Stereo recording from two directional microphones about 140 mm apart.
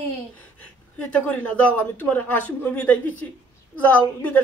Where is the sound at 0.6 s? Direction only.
10° left (ahead or behind).